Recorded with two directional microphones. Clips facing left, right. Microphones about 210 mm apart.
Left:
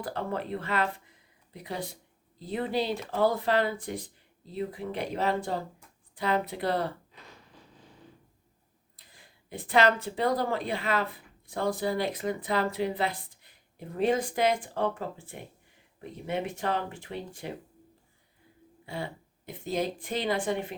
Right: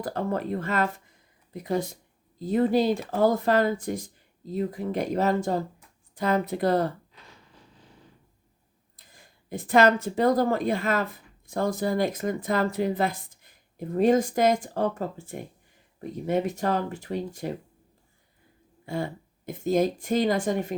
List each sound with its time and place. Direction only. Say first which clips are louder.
0.0 s speech: right 5 dB; 45° right (ahead or behind)
9.0 s speech: right 2 dB; 45° right (ahead or behind)
18.9 s speech: right 6 dB; 45° right (ahead or behind)